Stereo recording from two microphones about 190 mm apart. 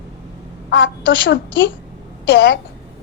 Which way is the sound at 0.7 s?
70° left (ahead or behind).